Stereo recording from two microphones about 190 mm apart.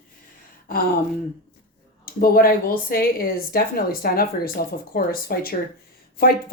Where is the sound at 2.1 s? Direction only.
50° left (ahead or behind).